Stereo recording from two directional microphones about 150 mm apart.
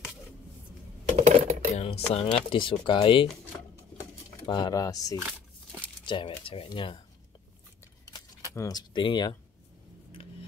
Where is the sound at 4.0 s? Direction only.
25° left (ahead or behind).